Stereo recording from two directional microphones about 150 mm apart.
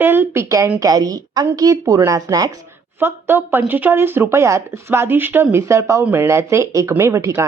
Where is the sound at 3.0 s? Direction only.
15° right (ahead or behind).